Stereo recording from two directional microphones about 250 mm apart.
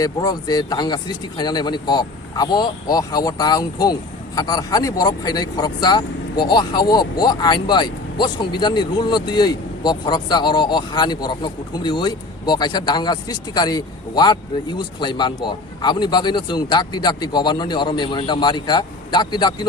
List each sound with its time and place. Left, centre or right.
0.0 s speech: centre